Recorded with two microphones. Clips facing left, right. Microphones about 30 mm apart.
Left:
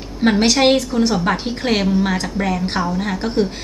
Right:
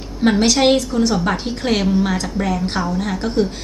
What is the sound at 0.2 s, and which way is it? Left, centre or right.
A woman's voice, centre.